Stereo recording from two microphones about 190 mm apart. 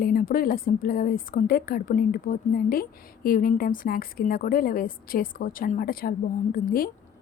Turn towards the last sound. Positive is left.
turn(degrees=50)  # may be behind; listen again after turning